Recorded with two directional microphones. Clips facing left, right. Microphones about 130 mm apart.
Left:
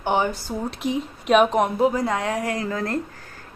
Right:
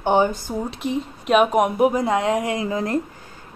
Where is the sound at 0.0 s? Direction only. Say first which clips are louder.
Right 4 dB; 15° right (ahead or behind).